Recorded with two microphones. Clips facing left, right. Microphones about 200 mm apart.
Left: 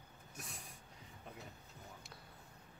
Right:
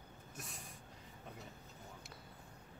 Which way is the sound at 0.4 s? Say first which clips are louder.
Even; centre (ahead or behind).